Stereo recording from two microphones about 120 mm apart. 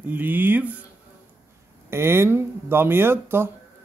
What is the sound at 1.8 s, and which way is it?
Speech, 20° right (ahead or behind).